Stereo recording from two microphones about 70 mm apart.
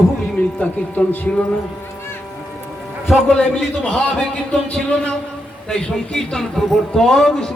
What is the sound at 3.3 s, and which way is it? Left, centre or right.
Speech, centre.